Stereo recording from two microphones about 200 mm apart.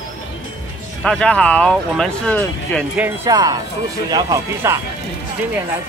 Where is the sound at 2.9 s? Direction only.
10° right (ahead or behind).